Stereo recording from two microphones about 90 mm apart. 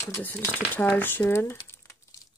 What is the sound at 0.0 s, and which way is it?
Speech, 25° left (ahead or behind).